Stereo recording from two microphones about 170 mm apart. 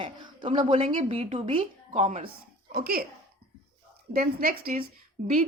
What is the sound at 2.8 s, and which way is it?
Speech, 60° right (ahead or behind).